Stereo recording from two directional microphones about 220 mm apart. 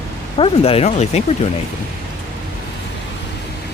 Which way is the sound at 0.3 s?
25° left (ahead or behind).